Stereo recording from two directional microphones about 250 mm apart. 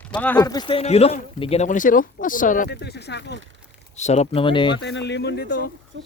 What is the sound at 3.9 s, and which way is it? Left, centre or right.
Speech, left.